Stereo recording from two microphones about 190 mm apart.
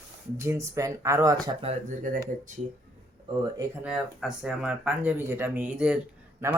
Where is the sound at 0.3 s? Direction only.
15° right (ahead or behind).